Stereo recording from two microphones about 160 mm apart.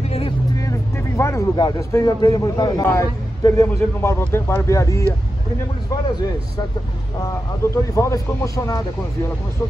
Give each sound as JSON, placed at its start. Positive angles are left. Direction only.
{"t": 0.6, "sound": "speech", "side_deg": 20}
{"t": 7.2, "sound": "speech", "side_deg": 20}